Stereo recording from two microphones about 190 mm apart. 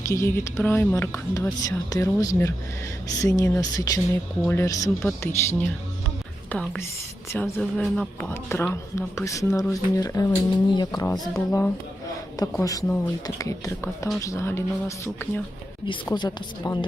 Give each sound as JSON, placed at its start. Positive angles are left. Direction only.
{"t": 0.0, "sound": "speech", "side_deg": 15}
{"t": 12.4, "sound": "speech", "side_deg": 20}